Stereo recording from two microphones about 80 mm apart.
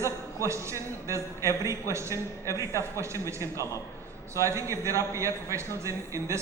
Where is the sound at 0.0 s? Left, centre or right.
Right.